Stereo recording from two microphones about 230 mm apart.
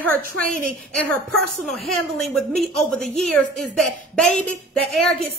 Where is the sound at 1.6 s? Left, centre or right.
Centre.